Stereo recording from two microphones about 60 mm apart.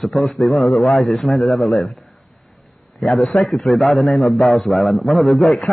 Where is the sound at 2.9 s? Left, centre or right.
Centre.